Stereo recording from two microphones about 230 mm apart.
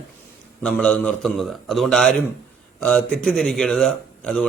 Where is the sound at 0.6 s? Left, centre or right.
Centre.